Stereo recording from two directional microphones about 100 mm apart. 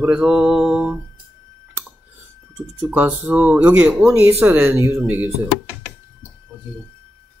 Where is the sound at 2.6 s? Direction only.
15° right (ahead or behind).